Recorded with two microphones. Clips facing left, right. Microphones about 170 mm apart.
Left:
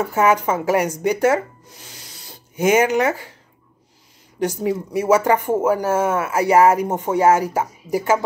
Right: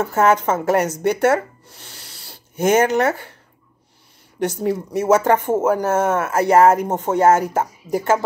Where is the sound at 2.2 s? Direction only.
10° left (ahead or behind).